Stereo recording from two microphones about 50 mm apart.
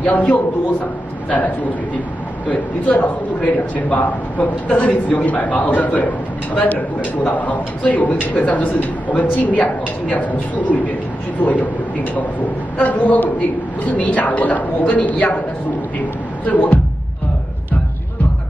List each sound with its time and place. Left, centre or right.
0.0 s a man's voice: left
2.4 s a man's voice: left
16.4 s a man's voice: left